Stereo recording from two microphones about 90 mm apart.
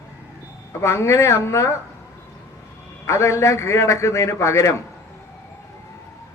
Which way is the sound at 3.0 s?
35° left (ahead or behind).